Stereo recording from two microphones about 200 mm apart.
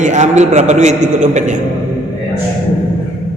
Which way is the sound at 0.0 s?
35° right (ahead or behind).